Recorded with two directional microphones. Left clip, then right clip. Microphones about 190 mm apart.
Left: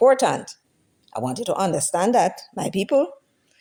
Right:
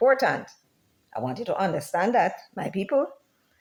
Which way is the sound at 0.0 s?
35° left (ahead or behind).